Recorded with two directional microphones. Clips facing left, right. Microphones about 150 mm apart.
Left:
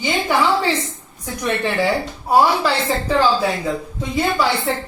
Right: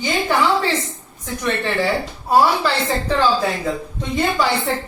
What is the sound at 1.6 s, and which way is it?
A woman's voice, 15° left (ahead or behind).